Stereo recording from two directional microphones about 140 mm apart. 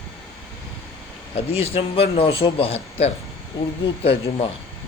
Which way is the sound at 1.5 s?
45° left (ahead or behind).